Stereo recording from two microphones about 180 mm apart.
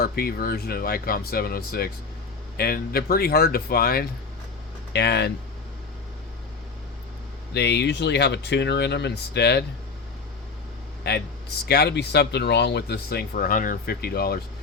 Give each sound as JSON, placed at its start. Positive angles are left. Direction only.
{"t": 0.0, "sound": "speech", "side_deg": 55}
{"t": 4.9, "sound": "speech", "side_deg": 70}
{"t": 7.5, "sound": "speech", "side_deg": 65}
{"t": 11.1, "sound": "speech", "side_deg": 65}